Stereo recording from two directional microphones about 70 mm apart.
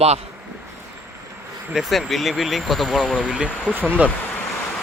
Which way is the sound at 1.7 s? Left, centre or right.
Centre.